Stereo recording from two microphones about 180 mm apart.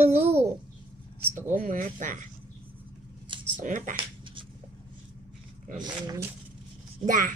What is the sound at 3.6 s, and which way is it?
Speech, 45° right (ahead or behind).